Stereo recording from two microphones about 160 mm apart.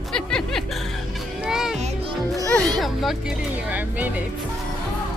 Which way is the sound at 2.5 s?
5° left (ahead or behind).